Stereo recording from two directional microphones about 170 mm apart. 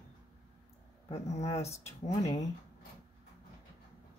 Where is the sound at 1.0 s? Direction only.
40° left (ahead or behind).